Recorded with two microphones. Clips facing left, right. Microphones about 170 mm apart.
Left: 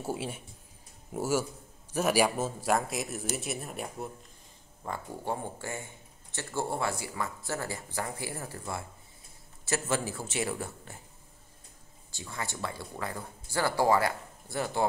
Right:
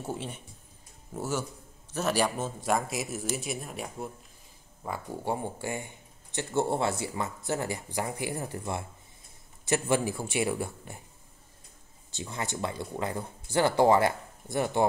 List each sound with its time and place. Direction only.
0.0 s speech: 5° left (ahead or behind)
4.8 s a man's voice: 10° right (ahead or behind)
12.1 s speech: 20° right (ahead or behind)